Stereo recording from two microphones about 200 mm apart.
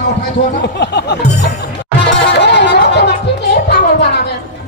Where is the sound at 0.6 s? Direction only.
55° left (ahead or behind).